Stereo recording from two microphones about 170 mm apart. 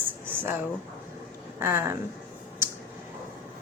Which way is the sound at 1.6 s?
15° right (ahead or behind).